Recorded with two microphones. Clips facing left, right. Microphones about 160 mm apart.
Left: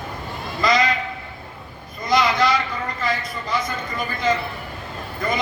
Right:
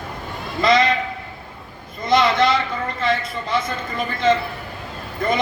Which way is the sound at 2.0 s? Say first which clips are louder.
Right 2 dB; 25° right (ahead or behind).